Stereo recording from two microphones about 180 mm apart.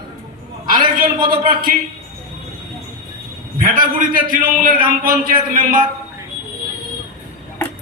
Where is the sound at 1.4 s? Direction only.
50° right (ahead or behind).